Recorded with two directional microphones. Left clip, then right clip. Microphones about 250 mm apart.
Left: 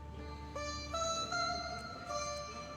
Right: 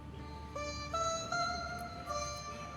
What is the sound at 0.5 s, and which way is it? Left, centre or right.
Music, centre.